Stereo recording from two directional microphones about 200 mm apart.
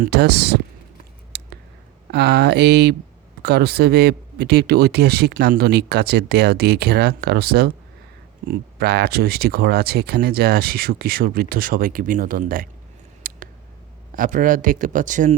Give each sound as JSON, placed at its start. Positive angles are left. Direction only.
{"t": 0.0, "sound": "speech", "side_deg": -55}
{"t": 1.3, "sound": "clicking", "side_deg": -55}
{"t": 2.1, "sound": "speech", "side_deg": -55}
{"t": 13.2, "sound": "scissors", "side_deg": -45}
{"t": 14.2, "sound": "speech", "side_deg": -40}